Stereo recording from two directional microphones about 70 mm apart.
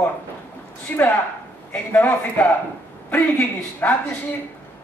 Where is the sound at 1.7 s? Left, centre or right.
Left.